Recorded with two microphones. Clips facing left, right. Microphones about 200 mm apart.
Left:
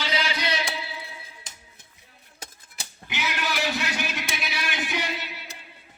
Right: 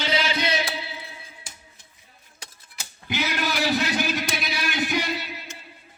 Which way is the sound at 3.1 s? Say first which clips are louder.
Right 4 dB; 35° right (ahead or behind).